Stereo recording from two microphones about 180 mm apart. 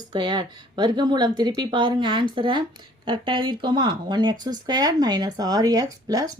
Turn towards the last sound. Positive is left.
turn(degrees=-20)  # may be behind; listen again after turning